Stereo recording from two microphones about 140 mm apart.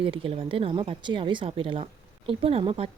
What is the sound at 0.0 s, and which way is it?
A woman's voice, 40° right (ahead or behind).